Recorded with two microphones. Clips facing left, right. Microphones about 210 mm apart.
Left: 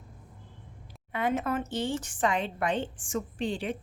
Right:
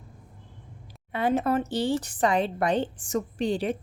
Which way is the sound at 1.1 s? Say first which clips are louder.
Right 5 dB; 35° right (ahead or behind).